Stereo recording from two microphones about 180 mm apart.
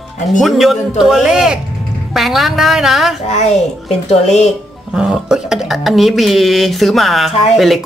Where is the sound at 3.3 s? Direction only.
40° left (ahead or behind).